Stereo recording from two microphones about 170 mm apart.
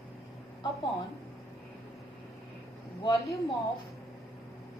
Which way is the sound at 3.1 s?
20° left (ahead or behind).